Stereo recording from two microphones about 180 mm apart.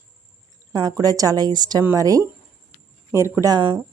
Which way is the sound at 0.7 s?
20° right (ahead or behind).